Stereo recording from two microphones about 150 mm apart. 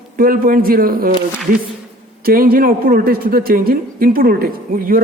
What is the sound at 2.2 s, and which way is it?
A man's voice, 75° right (ahead or behind).